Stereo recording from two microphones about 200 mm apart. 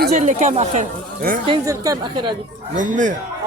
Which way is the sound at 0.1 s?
35° right (ahead or behind).